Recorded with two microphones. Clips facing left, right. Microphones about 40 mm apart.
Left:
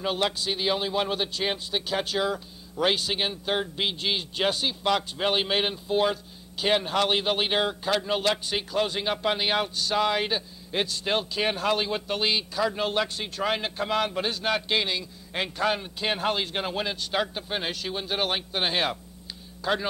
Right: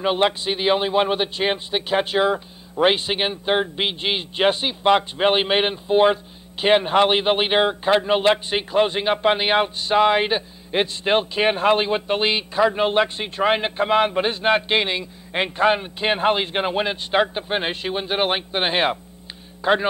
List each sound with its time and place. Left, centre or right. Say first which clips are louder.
0.0 s a man's voice: right 7 dB; right